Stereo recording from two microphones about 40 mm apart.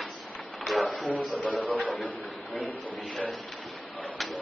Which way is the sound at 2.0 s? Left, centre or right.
Left.